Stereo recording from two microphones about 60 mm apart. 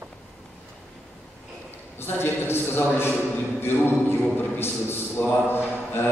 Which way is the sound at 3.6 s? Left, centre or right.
Left.